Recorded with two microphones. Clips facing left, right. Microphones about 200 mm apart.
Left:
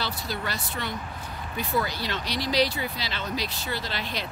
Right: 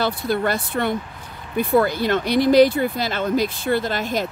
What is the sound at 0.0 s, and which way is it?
Speech, 55° right (ahead or behind).